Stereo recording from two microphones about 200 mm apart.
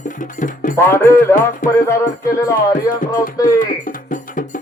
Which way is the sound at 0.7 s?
10° left (ahead or behind).